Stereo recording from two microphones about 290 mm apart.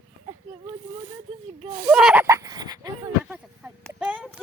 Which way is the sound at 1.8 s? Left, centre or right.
Centre.